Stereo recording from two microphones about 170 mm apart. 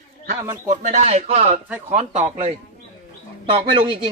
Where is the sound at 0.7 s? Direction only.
45° right (ahead or behind).